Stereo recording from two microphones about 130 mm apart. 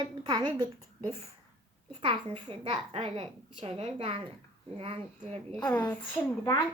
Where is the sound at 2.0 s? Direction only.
40° right (ahead or behind).